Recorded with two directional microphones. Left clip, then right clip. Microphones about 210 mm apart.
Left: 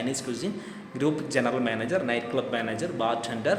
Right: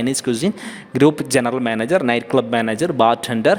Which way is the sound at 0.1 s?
50° right (ahead or behind).